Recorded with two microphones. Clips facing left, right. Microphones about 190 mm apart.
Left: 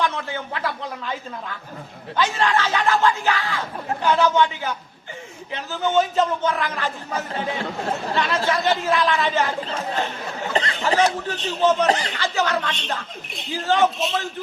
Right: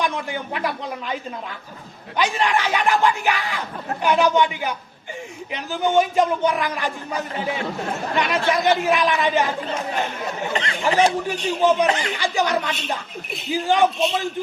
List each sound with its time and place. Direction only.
0.0 s a man's voice: 15° right (ahead or behind)
10.5 s speech: 35° left (ahead or behind)
10.8 s a man's voice: 15° right (ahead or behind)
11.9 s speech: 35° left (ahead or behind)
12.1 s a man's voice: 15° right (ahead or behind)